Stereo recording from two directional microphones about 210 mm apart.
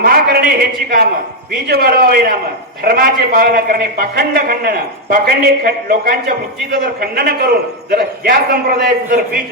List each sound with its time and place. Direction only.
0.0 s a man's voice: 50° right (ahead or behind)